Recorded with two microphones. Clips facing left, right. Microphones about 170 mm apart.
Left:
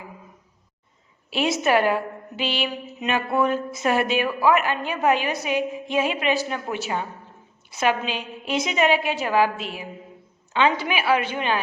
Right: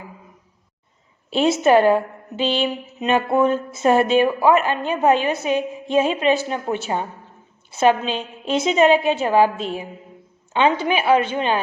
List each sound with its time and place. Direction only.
1.4 s a woman's voice: 25° right (ahead or behind)